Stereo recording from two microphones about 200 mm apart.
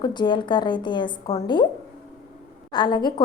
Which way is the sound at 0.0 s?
20° left (ahead or behind).